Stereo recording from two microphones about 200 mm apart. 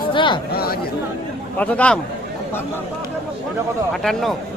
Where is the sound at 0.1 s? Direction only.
25° left (ahead or behind).